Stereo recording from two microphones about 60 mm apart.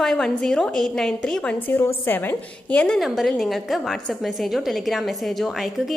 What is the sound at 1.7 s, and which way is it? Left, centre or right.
A woman's voice, left.